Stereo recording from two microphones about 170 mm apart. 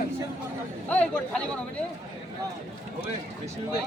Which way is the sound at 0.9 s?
10° left (ahead or behind).